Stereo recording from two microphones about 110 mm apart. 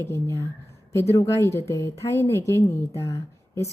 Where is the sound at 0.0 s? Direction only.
25° left (ahead or behind).